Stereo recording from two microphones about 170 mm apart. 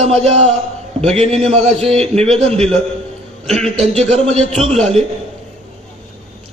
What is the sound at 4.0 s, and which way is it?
A man's voice, 40° right (ahead or behind).